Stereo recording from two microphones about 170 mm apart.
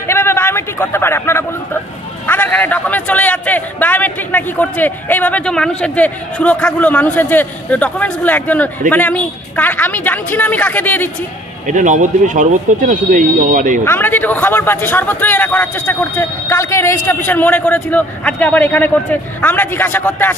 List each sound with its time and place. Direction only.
0.0 s a sound: 15° left (ahead or behind)
2.2 s a man's voice: 10° left (ahead or behind)
11.6 s speech: 45° right (ahead or behind)
13.8 s a man's voice: 10° left (ahead or behind)